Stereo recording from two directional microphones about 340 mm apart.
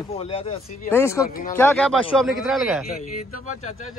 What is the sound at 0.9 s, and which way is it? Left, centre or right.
Speech, centre.